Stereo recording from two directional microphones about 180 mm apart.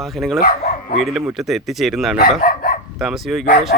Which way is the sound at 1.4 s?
Centre (ahead or behind).